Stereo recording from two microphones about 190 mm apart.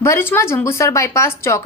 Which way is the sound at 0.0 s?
15° left (ahead or behind).